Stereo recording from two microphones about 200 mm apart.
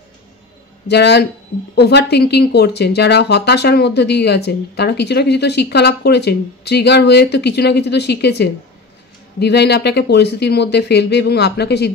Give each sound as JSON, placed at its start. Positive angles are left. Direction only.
{"t": 0.8, "sound": "speech", "side_deg": 55}